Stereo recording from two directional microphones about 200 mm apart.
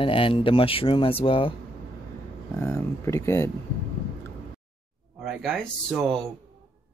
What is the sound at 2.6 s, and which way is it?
Speech, 15° left (ahead or behind).